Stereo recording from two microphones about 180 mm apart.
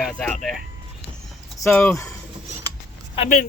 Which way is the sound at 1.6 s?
10° left (ahead or behind).